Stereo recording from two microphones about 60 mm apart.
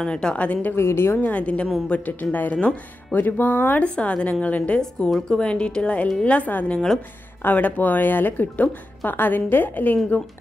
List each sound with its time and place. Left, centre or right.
0.0 s a woman's voice: centre
0.7 s a woman's voice: left
1.1 s a woman's voice: left
3.8 s a woman's voice: left
4.7 s a woman's voice: centre; by 9.9 s left